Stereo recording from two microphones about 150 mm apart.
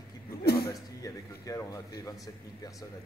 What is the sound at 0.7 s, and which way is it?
A man's voice, 25° left (ahead or behind).